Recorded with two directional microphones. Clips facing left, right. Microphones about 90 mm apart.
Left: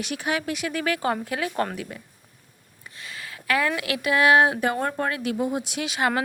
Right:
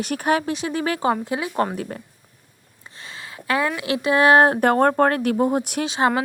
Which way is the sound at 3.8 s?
30° right (ahead or behind).